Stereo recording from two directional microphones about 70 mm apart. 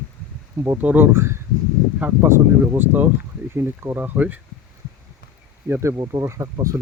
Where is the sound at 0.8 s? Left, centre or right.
Right.